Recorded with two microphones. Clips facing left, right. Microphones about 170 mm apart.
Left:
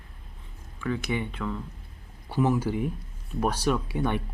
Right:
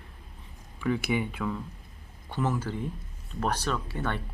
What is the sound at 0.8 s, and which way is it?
Speech, 10° right (ahead or behind).